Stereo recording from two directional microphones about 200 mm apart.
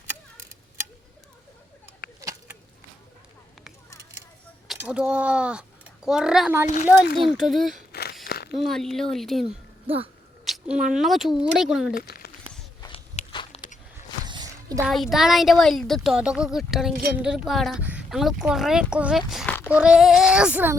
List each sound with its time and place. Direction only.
4.8 s speech: 5° right (ahead or behind)
8.2 s a sound: 50° left (ahead or behind)
8.5 s speech: centre (ahead or behind)
9.8 s speech: 30° right (ahead or behind)
10.4 s a sound: centre (ahead or behind)
10.9 s speech: centre (ahead or behind)
11.9 s a sound: 50° left (ahead or behind)
13.1 s biting: 25° left (ahead or behind)
14.3 s music: 20° right (ahead or behind)
14.8 s speech: centre (ahead or behind)
19.3 s a sound: centre (ahead or behind)
19.7 s speech: 5° right (ahead or behind)